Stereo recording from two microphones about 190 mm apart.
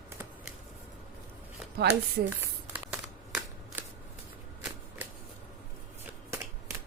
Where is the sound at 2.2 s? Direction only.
55° right (ahead or behind).